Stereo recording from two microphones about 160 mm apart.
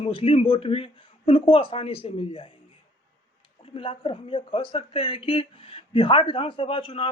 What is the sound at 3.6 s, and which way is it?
Speech, 35° left (ahead or behind).